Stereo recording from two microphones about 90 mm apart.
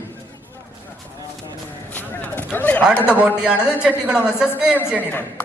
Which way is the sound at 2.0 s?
20° left (ahead or behind).